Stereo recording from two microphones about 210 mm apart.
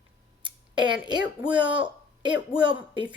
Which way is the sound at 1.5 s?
20° right (ahead or behind).